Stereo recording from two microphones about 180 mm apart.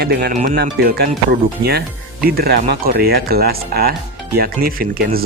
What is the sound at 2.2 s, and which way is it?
Speech, 60° right (ahead or behind).